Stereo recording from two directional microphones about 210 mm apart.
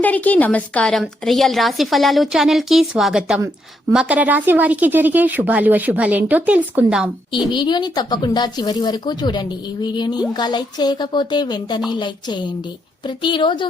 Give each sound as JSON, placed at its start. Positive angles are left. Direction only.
{"t": 0.0, "sound": "a woman's voice", "side_deg": 5}
{"t": 7.5, "sound": "speech", "side_deg": 20}